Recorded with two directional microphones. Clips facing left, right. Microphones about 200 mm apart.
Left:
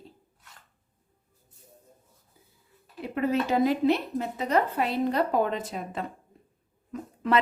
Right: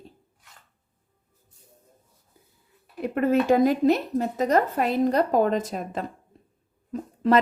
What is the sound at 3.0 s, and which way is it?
A woman's voice, 50° right (ahead or behind).